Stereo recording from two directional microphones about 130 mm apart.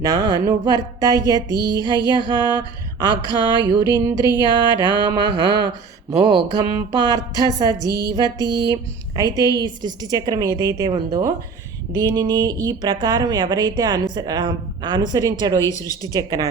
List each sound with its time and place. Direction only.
0.0 s a woman's voice: 30° right (ahead or behind)
2.4 s speech: 35° left (ahead or behind)
3.0 s a woman's voice: 35° right (ahead or behind)
4.7 s speech: 35° left (ahead or behind)
5.0 s a woman's voice: 35° right (ahead or behind)
15.9 s a woman's voice: 25° left (ahead or behind)
16.1 s a woman's voice: 30° right (ahead or behind)